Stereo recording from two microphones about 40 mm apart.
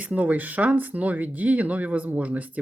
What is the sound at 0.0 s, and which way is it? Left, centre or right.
Speech, right.